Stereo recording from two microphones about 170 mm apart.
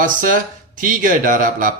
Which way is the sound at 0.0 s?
50° right (ahead or behind).